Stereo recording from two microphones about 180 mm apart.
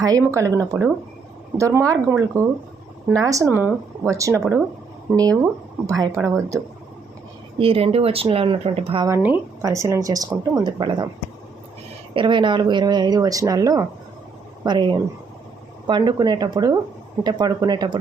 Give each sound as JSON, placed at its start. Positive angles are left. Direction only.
{"t": 0.3, "sound": "speech", "side_deg": -15}
{"t": 3.2, "sound": "speech", "side_deg": -20}
{"t": 7.6, "sound": "speech", "side_deg": -35}
{"t": 9.0, "sound": "speech", "side_deg": -10}
{"t": 12.1, "sound": "speech", "side_deg": -25}
{"t": 15.9, "sound": "speech", "side_deg": -25}